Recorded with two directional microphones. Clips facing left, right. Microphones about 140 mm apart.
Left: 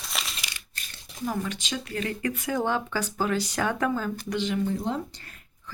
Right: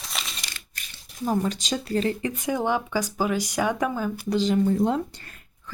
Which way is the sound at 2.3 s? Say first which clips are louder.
Right 2 dB; 15° right (ahead or behind).